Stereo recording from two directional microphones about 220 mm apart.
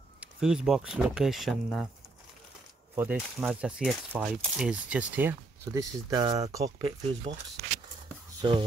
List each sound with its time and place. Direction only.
0.2 s speech: 5° right (ahead or behind)
3.0 s speech: 5° right (ahead or behind)
8.4 s speech: 20° right (ahead or behind)